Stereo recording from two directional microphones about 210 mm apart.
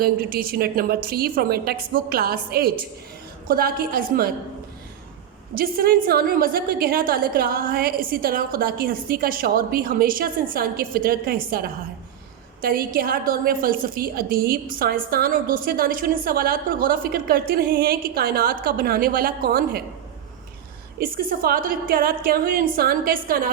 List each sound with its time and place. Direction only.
0.0 s a woman's voice: 45° right (ahead or behind)
5.5 s a woman's voice: 45° right (ahead or behind)
21.0 s a woman's voice: 45° right (ahead or behind)